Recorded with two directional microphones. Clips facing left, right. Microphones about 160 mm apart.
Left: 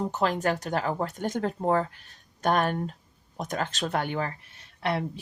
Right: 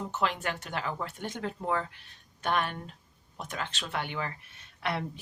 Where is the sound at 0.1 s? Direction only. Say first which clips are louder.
Left 6 dB; 40° left (ahead or behind).